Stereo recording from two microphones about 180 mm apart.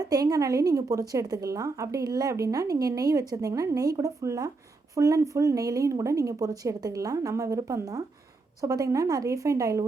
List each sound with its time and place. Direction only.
0.0 s a woman's voice: 20° right (ahead or behind)